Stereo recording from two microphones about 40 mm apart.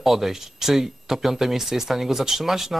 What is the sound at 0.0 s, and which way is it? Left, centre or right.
A man's voice, centre.